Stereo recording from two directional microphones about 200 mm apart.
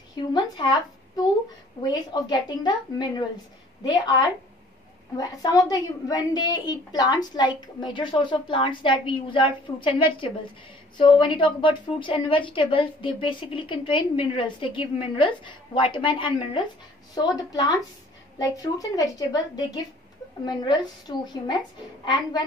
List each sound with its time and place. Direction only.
0.3 s a woman's voice: 20° left (ahead or behind)
11.0 s a woman's voice: 25° left (ahead or behind)